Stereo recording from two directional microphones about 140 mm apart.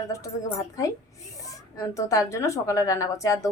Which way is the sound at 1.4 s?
25° left (ahead or behind).